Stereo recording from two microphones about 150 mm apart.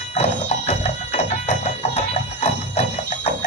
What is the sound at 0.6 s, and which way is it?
Music, 50° left (ahead or behind).